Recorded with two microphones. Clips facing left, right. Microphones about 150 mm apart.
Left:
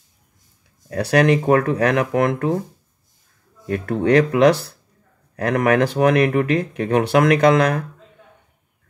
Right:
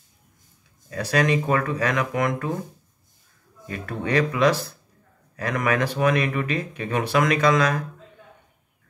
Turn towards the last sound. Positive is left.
turn(degrees=65)  # may be behind; listen again after turning